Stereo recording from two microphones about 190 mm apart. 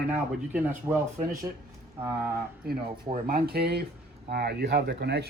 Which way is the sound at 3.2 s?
50° right (ahead or behind).